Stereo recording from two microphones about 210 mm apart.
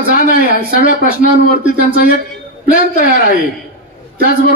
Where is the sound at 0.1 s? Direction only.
40° left (ahead or behind).